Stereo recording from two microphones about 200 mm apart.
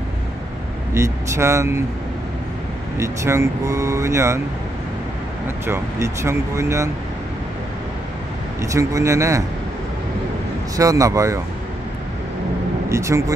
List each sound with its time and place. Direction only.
0.9 s speech: 15° right (ahead or behind)
3.0 s speech: 15° right (ahead or behind)
5.7 s speech: 15° right (ahead or behind)
8.5 s speech: 15° right (ahead or behind)
10.8 s speech: 15° right (ahead or behind)
12.9 s speech: 15° right (ahead or behind)